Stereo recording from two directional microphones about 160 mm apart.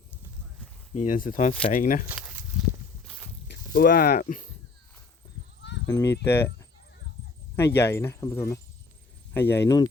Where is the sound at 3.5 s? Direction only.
75° left (ahead or behind); by 4.4 s 55° left (ahead or behind).